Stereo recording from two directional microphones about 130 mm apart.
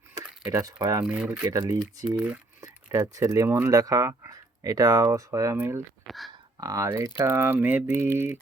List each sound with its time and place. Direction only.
0.1 s speech: 25° right (ahead or behind)
1.0 s speech: 10° right (ahead or behind)
1.3 s speech: 25° right (ahead or behind)
2.0 s speech: 5° right (ahead or behind)
2.6 s speech: 25° right (ahead or behind)
6.1 s a sound: centre (ahead or behind)
6.6 s speech: 25° right (ahead or behind)